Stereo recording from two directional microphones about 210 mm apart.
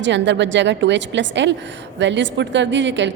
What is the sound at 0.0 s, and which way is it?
A woman's voice, 60° right (ahead or behind).